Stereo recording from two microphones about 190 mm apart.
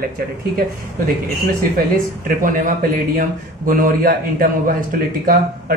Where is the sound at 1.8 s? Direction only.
45° right (ahead or behind).